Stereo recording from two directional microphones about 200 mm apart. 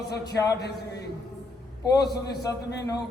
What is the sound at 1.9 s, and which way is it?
Speech, 20° left (ahead or behind).